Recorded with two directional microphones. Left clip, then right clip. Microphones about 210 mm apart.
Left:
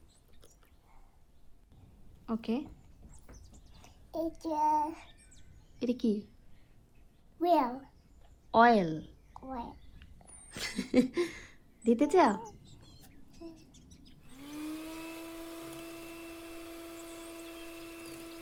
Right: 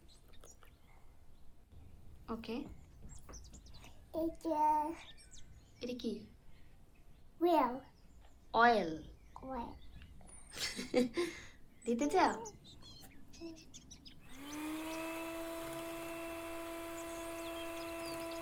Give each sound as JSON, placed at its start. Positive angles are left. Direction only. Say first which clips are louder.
{"t": 2.2, "sound": "a woman's voice", "louder": "left 7 dB", "side_deg": 30}
{"t": 4.1, "sound": "child singing", "louder": "left 2 dB", "side_deg": 30}
{"t": 5.0, "sound": "bird vocalization", "louder": "right 2 dB", "side_deg": 0}
{"t": 5.8, "sound": "a child's voice", "louder": "left 9 dB", "side_deg": 30}
{"t": 7.3, "sound": "a child's voice", "louder": "left 4 dB", "side_deg": 30}
{"t": 8.5, "sound": "a sound", "louder": "left 5 dB", "side_deg": 30}
{"t": 12.7, "sound": "livestock", "louder": "right 2 dB", "side_deg": 0}
{"t": 14.5, "sound": "a sound", "louder": "left 1 dB", "side_deg": -15}